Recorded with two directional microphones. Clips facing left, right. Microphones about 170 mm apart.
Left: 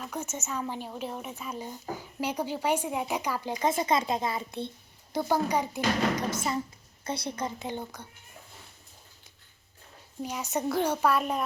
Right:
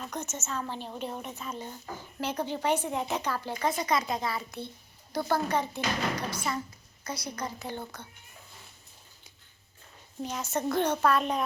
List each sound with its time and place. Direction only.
0.0 s a woman's voice: 5° left (ahead or behind)
7.0 s a woman's voice: 25° left (ahead or behind)
10.2 s a woman's voice: 15° left (ahead or behind)